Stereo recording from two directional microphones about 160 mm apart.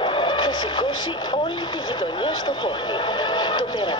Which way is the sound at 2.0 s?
25° left (ahead or behind).